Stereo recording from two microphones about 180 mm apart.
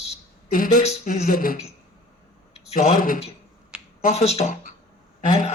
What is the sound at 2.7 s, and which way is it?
Speech, 50° left (ahead or behind).